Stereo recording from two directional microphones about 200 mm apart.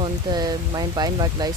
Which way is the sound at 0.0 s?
20° right (ahead or behind).